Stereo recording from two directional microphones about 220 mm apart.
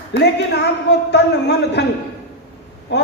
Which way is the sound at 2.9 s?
50° left (ahead or behind).